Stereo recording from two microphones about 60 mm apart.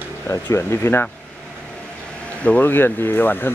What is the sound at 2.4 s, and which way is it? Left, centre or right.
Speech, left.